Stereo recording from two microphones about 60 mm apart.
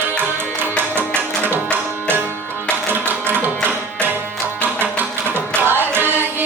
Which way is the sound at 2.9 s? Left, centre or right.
Right.